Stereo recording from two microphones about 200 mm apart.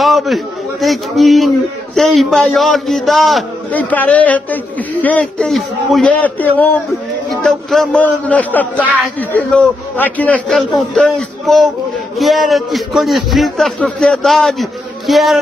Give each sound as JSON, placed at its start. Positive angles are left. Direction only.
{"t": 0.0, "sound": "a man's voice", "side_deg": 0}